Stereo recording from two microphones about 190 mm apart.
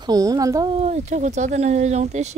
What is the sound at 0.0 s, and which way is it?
Speech, 20° right (ahead or behind).